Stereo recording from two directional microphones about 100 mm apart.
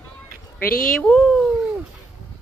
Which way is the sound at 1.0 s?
5° left (ahead or behind).